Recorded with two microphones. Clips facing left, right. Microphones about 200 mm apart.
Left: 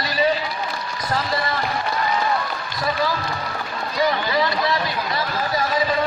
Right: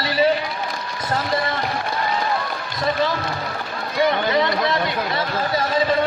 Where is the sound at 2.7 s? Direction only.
25° right (ahead or behind).